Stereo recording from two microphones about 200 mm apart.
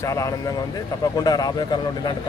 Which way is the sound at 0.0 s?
15° left (ahead or behind).